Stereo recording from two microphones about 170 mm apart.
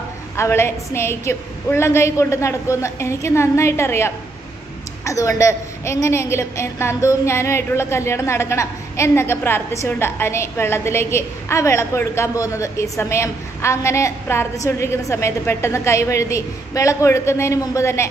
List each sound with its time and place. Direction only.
0.4 s a woman's voice: 15° left (ahead or behind)